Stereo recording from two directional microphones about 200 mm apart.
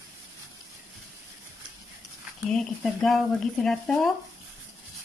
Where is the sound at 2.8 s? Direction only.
Centre (ahead or behind).